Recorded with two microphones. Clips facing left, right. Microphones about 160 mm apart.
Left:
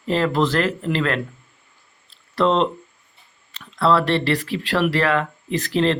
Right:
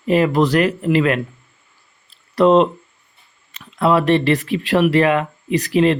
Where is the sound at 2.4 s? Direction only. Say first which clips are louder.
Right 6 dB; 15° right (ahead or behind).